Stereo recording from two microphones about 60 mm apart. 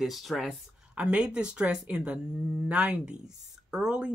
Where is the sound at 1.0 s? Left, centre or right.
Centre.